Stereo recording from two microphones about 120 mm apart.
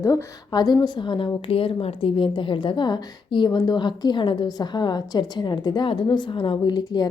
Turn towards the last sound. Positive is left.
turn(degrees=35)  # may be behind; listen again after turning